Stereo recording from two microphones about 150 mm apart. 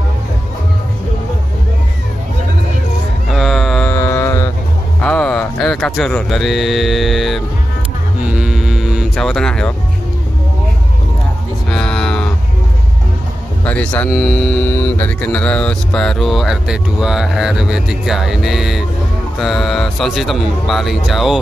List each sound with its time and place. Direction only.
3.3 s music: centre (ahead or behind)
3.9 s mantra: 20° left (ahead or behind)
5.0 s speech: 10° left (ahead or behind)
8.3 s music: 5° right (ahead or behind)
11.7 s a sound: 5° left (ahead or behind)
13.7 s speech: 10° left (ahead or behind)
14.7 s speech: 15° left (ahead or behind)